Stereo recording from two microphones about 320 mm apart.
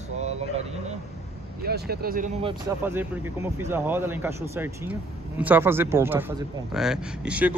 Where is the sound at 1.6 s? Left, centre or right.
Right.